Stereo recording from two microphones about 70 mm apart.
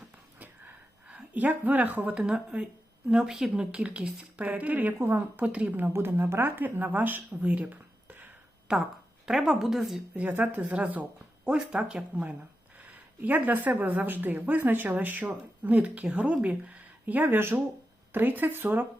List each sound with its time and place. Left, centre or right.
0.3 s a sound: right
2.1 s a woman's voice: centre
5.9 s a woman's voice: right
8.6 s a woman's voice: centre
10.2 s a woman's voice: centre
13.2 s a woman's voice: right